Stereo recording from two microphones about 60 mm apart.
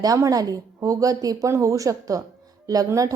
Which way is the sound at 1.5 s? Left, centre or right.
Right.